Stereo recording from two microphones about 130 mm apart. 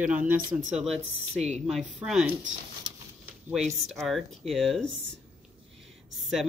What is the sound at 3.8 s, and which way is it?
Speech, centre (ahead or behind).